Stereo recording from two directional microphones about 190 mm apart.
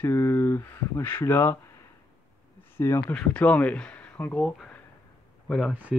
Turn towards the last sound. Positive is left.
turn(degrees=-5)  # may be behind; listen again after turning